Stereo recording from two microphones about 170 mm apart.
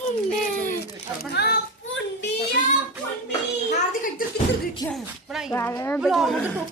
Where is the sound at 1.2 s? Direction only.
70° left (ahead or behind).